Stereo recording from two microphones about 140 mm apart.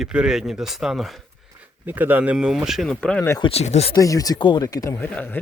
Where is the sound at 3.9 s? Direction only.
25° left (ahead or behind).